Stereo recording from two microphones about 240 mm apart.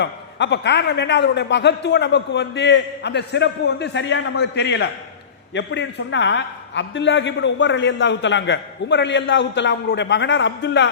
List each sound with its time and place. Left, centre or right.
0.0 s a man's voice: left